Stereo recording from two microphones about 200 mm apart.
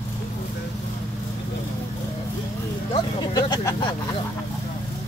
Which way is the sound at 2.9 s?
20° left (ahead or behind).